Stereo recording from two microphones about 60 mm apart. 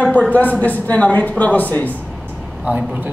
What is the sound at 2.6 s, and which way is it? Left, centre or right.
Speech, right.